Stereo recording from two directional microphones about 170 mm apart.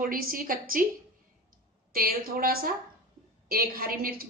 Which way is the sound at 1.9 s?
60° right (ahead or behind).